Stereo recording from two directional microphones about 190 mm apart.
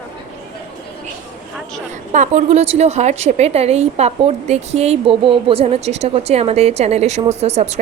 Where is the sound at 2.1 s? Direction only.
40° right (ahead or behind).